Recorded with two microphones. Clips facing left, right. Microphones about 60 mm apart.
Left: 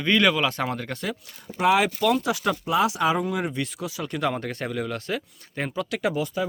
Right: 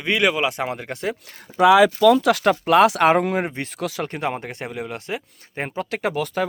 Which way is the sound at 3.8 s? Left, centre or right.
Right.